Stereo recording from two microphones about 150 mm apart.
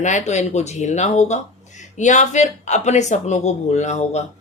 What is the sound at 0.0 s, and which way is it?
Speech, 55° left (ahead or behind).